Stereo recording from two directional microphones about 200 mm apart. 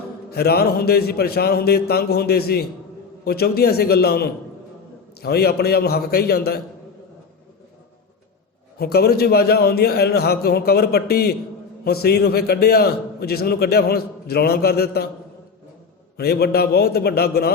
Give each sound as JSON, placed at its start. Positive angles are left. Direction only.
{"t": 0.3, "sound": "a man's voice", "side_deg": 50}
{"t": 8.8, "sound": "a man's voice", "side_deg": 50}
{"t": 16.1, "sound": "a man's voice", "side_deg": 55}